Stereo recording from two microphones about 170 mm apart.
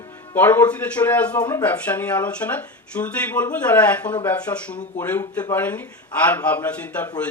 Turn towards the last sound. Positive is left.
turn(degrees=10)  # may be behind; listen again after turning